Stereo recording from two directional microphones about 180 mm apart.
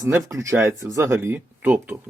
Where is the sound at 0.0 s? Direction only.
15° right (ahead or behind).